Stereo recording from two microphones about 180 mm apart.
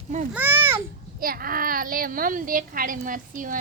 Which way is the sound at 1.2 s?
50° right (ahead or behind).